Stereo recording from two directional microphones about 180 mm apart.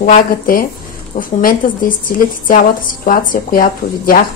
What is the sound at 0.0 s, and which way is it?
Speech, 50° left (ahead or behind).